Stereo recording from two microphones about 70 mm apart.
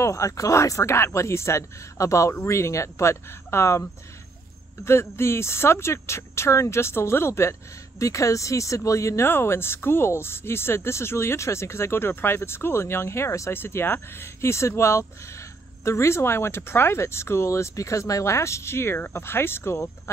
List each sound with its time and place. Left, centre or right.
0.0 s speech: left
4.8 s speech: left